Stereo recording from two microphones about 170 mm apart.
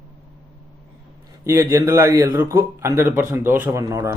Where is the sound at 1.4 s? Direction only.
15° right (ahead or behind).